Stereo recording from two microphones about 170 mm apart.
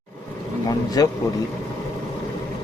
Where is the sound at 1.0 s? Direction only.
20° left (ahead or behind).